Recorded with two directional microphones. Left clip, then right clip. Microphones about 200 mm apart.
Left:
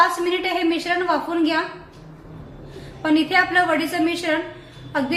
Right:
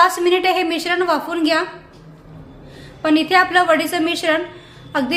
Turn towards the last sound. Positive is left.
turn(degrees=-50)  # may be behind; listen again after turning